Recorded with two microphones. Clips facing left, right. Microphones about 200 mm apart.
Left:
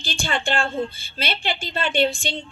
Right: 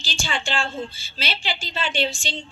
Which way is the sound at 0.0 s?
55° left (ahead or behind).